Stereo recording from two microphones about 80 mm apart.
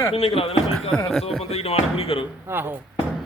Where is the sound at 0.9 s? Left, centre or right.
Centre.